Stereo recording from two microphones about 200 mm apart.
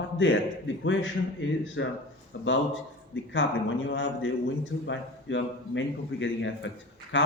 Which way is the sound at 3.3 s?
70° left (ahead or behind).